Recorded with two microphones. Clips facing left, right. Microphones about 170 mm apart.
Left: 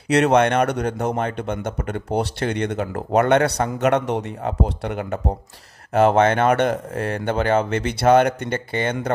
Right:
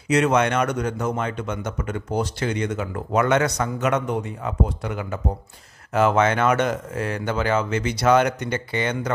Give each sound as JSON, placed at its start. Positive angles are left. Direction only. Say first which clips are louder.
{"t": 0.1, "sound": "a man's voice", "louder": "left 3 dB", "side_deg": 65}